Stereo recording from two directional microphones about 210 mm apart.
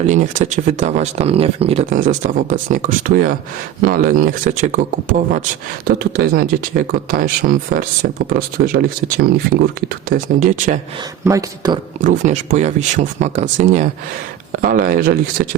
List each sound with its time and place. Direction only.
0.1 s speech: 35° right (ahead or behind)
11.3 s speech: 15° right (ahead or behind)
12.0 s speech: 35° right (ahead or behind)